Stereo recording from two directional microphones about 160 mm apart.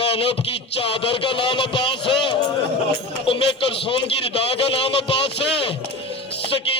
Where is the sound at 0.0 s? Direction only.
35° left (ahead or behind).